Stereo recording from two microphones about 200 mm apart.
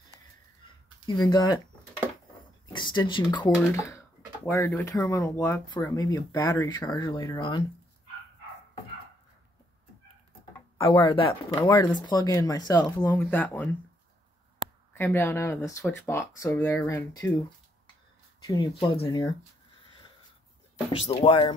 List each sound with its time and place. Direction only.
1.0 s speech: 20° left (ahead or behind)
2.7 s speech: 20° left (ahead or behind)
10.8 s speech: 25° left (ahead or behind); by 13.7 s 5° left (ahead or behind)
15.0 s speech: 10° left (ahead or behind)
18.5 s speech: 20° left (ahead or behind)
21.0 s speech: 25° left (ahead or behind)